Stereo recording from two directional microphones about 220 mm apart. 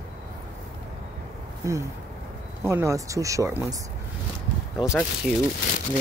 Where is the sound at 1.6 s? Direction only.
15° right (ahead or behind).